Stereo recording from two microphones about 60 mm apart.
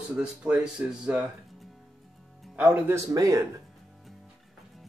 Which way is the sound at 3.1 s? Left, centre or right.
Right.